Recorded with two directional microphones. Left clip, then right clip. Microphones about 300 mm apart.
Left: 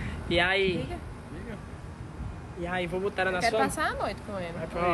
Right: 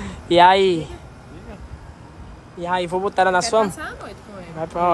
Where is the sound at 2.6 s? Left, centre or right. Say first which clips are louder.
Right 9 dB; centre.